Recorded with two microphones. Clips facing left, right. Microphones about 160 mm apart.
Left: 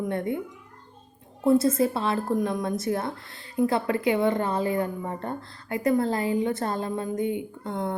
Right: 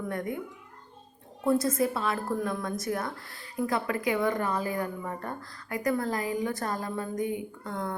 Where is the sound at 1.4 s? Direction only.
25° left (ahead or behind).